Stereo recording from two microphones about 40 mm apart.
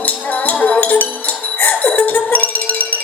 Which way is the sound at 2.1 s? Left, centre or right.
Left.